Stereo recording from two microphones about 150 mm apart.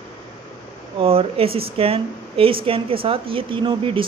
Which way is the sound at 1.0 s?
40° right (ahead or behind).